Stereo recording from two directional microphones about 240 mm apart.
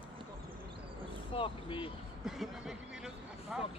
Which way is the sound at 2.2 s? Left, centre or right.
Centre.